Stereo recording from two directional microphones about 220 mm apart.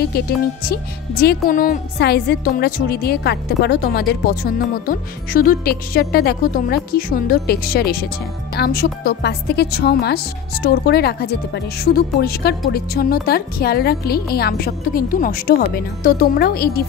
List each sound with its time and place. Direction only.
1.2 s a woman's voice: 40° left (ahead or behind)